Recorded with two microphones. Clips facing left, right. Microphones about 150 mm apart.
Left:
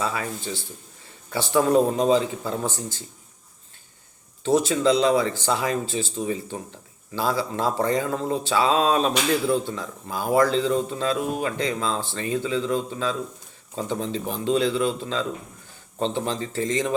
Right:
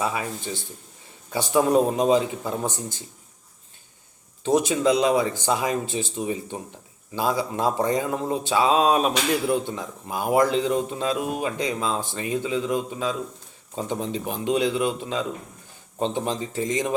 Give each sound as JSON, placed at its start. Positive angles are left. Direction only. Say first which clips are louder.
{"t": 0.0, "sound": "speech", "louder": "right 1 dB", "side_deg": -20}
{"t": 4.4, "sound": "speech", "louder": "even", "side_deg": -15}